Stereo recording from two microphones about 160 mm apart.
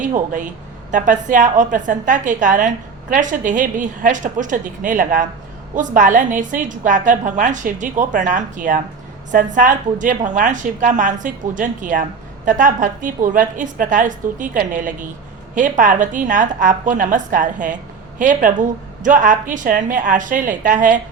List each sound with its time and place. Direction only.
0.0 s a woman's voice: 55° right (ahead or behind)